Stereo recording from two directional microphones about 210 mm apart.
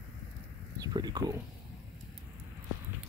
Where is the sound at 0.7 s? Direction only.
20° right (ahead or behind).